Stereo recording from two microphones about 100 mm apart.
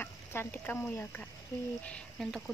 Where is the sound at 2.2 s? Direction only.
Centre (ahead or behind).